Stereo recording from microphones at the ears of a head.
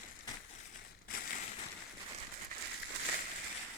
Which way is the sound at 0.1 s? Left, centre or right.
Left.